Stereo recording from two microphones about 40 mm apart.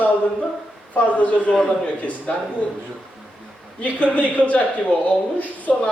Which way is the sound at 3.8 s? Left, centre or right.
Left.